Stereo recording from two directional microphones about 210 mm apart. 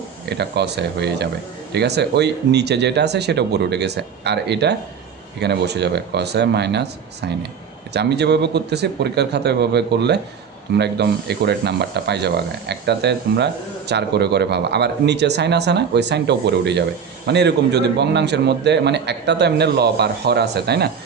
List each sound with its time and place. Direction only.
0.3 s speech: 50° right (ahead or behind)